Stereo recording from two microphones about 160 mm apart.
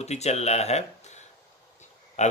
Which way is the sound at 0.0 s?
45° left (ahead or behind).